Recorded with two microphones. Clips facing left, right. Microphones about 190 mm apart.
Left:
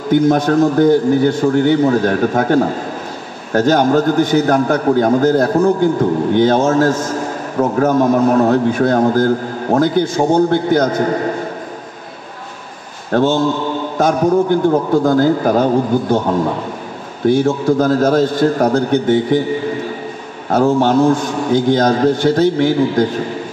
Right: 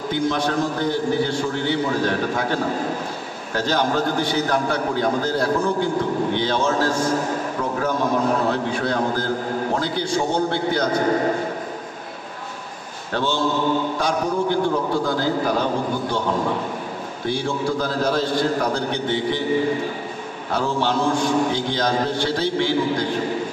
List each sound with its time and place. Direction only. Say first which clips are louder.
0.1 s a man's voice: left 10 dB; 50° left (ahead or behind)
13.1 s a man's voice: left 8 dB; 50° left (ahead or behind)
17.3 s a man's voice: left 10 dB; 50° left (ahead or behind)
20.4 s a man's voice: left 10 dB; 50° left (ahead or behind)